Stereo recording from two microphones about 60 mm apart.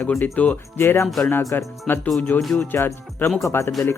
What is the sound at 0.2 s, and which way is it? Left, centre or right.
Speech, left.